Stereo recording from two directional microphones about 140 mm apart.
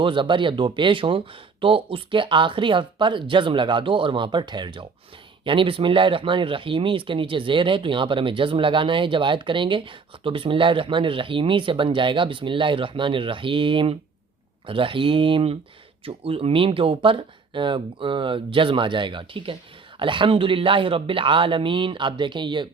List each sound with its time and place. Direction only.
0.0 s speech: 35° right (ahead or behind)